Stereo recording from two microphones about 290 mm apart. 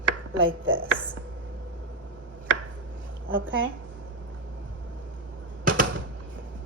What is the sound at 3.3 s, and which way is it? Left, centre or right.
Speech, right.